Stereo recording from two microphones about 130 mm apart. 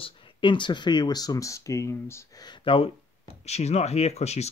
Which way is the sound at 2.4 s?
40° left (ahead or behind).